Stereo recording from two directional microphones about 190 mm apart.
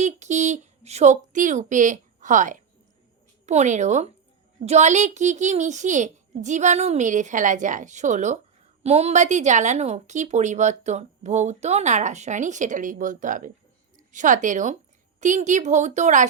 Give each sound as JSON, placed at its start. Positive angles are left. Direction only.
{"t": 0.0, "sound": "a woman's voice", "side_deg": -40}